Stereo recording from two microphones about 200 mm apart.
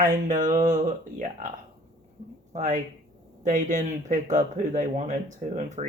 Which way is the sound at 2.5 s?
35° right (ahead or behind).